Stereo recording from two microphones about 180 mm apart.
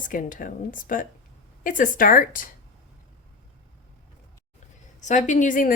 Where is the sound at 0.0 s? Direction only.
50° left (ahead or behind).